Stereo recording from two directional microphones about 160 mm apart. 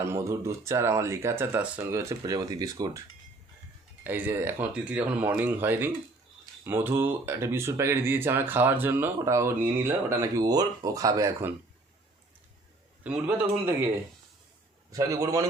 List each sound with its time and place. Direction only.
0.0 s speech: 15° right (ahead or behind)
4.0 s speech: 15° right (ahead or behind)
13.2 s speech: 15° right (ahead or behind)
14.9 s a man's voice: 20° right (ahead or behind)